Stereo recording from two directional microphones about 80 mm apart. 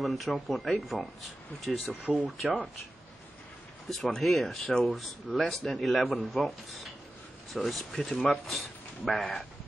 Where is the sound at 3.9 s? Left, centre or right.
Centre.